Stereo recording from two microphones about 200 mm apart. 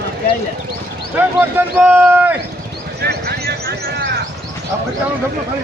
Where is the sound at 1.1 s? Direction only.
10° right (ahead or behind).